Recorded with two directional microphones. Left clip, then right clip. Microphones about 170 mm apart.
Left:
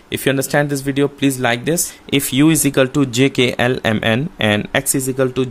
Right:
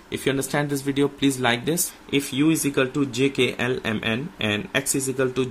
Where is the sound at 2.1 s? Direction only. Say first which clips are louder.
Left 7 dB; 50° left (ahead or behind).